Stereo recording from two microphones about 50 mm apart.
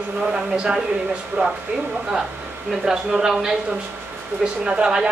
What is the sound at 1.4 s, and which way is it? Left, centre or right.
Speech, right.